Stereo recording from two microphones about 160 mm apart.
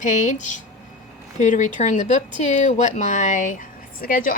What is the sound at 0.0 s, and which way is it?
A woman's voice, 50° left (ahead or behind).